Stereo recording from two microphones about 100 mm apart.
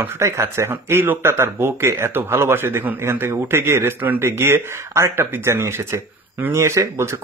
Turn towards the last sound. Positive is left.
turn(degrees=-30)  # may be behind; listen again after turning